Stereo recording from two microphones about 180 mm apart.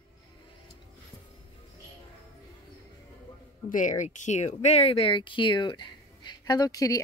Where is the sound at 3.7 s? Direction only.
45° left (ahead or behind).